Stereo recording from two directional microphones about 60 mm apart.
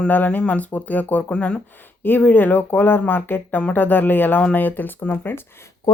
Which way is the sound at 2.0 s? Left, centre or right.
Left.